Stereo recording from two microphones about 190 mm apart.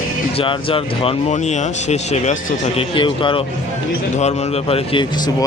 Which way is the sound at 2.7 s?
25° left (ahead or behind).